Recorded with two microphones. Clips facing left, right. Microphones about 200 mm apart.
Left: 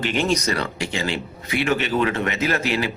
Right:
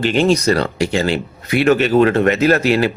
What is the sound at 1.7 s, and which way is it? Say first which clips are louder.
Speech: right 9 dB; 40° right (ahead or behind).